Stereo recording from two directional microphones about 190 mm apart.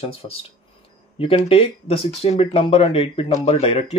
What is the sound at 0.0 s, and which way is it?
Speech, 30° left (ahead or behind).